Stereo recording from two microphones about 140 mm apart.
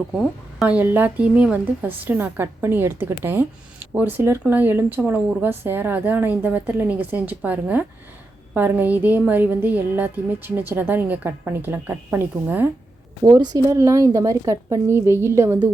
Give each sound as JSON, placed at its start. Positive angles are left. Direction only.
{"t": 0.6, "sound": "speech", "side_deg": -10}
{"t": 13.2, "sound": "a woman's voice", "side_deg": -30}